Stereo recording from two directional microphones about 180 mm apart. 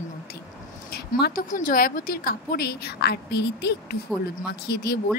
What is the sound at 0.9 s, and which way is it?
Speech, 65° left (ahead or behind).